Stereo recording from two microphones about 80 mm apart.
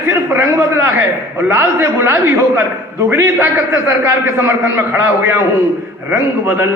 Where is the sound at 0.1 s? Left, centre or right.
Right.